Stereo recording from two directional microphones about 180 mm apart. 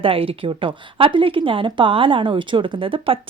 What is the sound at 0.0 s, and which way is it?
Speech, 30° right (ahead or behind).